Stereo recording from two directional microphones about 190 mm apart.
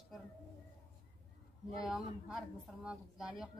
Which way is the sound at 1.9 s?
5° right (ahead or behind).